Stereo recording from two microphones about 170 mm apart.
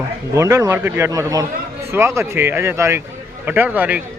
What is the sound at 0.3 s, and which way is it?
A man's voice, 15° right (ahead or behind).